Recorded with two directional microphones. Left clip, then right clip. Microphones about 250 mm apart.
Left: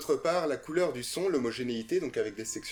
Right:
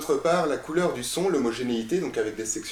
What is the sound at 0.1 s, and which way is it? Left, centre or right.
Speech, left.